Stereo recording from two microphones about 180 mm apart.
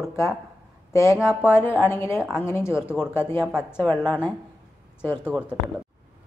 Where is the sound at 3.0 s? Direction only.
15° left (ahead or behind).